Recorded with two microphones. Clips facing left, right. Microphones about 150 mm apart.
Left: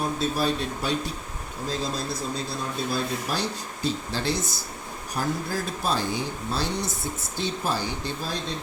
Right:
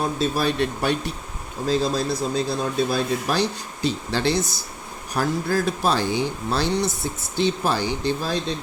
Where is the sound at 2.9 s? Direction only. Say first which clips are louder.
Right 5 dB; 85° right.